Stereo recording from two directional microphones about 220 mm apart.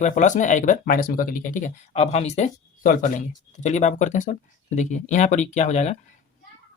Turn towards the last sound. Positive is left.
turn(degrees=30)  # may be behind; listen again after turning